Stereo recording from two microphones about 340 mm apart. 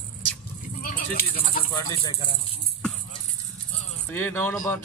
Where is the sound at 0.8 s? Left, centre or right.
Left.